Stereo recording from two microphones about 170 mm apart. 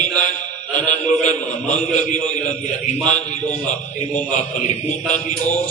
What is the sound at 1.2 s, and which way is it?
Speech, 45° left (ahead or behind).